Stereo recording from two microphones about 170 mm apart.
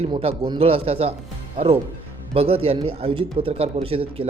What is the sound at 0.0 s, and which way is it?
Speech, 35° right (ahead or behind).